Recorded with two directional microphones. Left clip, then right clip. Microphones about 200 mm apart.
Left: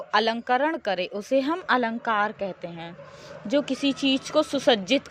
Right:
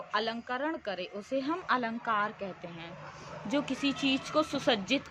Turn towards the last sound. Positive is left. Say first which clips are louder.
# left 8 dB
turn(degrees=35)  # may be behind; listen again after turning